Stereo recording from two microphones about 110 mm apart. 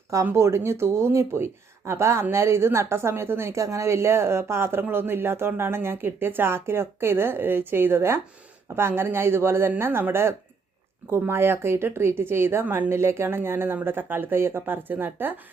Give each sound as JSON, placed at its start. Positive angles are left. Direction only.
{"t": 0.3, "sound": "a woman's voice", "side_deg": -25}